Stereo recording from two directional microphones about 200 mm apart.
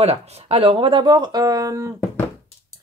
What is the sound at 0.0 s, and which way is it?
A woman's voice, 30° right (ahead or behind).